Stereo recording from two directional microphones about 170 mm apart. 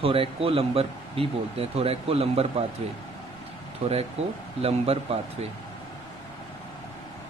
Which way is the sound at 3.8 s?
40° right (ahead or behind).